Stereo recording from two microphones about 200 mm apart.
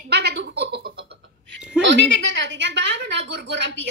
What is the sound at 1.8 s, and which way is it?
A woman's voice, 65° right (ahead or behind).